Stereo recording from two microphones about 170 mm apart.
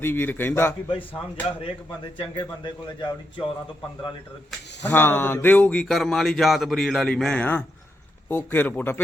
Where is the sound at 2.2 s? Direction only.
30° left (ahead or behind).